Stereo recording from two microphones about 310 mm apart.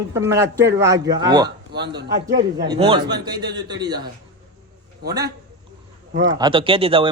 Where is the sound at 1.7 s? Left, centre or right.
Right.